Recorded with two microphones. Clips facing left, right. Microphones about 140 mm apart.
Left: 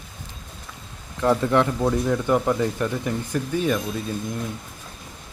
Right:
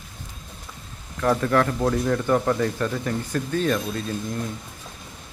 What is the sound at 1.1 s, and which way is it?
Speech, 20° left (ahead or behind).